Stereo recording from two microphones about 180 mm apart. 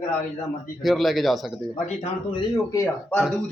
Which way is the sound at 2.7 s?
15° left (ahead or behind).